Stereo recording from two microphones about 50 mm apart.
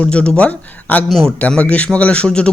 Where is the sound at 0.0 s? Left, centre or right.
Centre.